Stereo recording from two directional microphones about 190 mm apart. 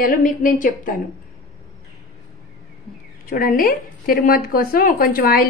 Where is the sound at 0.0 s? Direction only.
45° left (ahead or behind).